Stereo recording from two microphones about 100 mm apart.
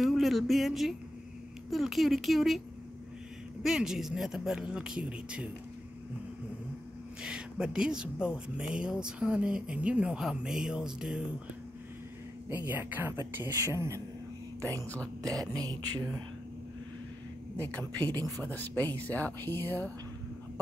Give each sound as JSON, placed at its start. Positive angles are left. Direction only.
{"t": 0.0, "sound": "speech", "side_deg": 0}
{"t": 3.6, "sound": "speech", "side_deg": -5}
{"t": 7.2, "sound": "speech", "side_deg": -10}
{"t": 12.4, "sound": "speech", "side_deg": -20}
{"t": 15.2, "sound": "speech", "side_deg": -40}
{"t": 17.6, "sound": "a woman's voice", "side_deg": 15}